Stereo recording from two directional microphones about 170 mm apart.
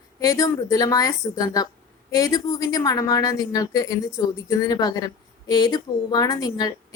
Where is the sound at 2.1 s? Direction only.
20° left (ahead or behind).